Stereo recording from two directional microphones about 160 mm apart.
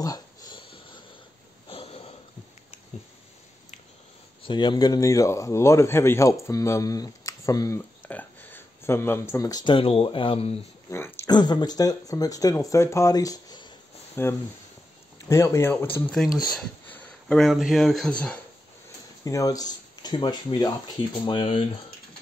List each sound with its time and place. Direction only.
0.0 s wheeze: 25° left (ahead or behind)
1.7 s a sound: 35° left (ahead or behind)
4.4 s speech: 30° left (ahead or behind)
10.9 s speech: 15° left (ahead or behind)
11.2 s speech: 25° left (ahead or behind)
14.2 s speech: 15° left (ahead or behind)
19.2 s speech: 20° left (ahead or behind)